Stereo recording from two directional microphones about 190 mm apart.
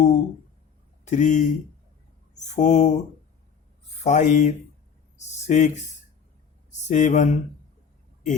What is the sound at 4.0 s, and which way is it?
A man's voice, 40° left (ahead or behind).